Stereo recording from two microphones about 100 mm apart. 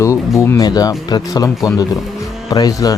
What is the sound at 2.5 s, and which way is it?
Speech, 40° left (ahead or behind).